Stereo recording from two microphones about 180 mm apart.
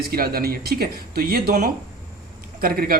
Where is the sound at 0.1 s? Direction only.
55° right (ahead or behind).